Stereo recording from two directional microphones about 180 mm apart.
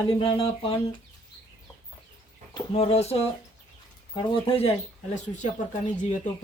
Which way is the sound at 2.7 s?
35° left (ahead or behind).